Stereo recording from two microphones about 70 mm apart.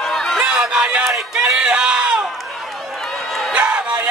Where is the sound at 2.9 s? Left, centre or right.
Centre.